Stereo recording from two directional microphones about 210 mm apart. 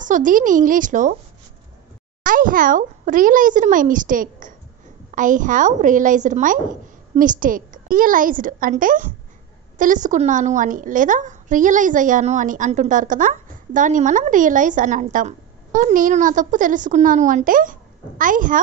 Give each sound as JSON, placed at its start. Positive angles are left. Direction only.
{"t": 0.0, "sound": "a woman's voice", "side_deg": -40}
{"t": 2.2, "sound": "a woman's voice", "side_deg": -40}